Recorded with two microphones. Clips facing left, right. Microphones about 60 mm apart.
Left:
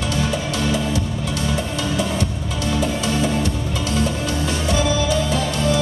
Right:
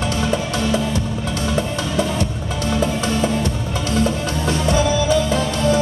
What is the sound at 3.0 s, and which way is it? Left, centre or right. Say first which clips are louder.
Music: right 1 dB; right.